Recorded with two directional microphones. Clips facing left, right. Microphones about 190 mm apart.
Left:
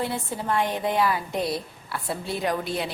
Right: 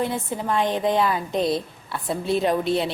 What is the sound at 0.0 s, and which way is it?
A woman's voice, 20° right (ahead or behind).